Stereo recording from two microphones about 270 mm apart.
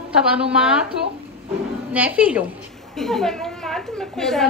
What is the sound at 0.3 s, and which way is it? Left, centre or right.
Speech, centre.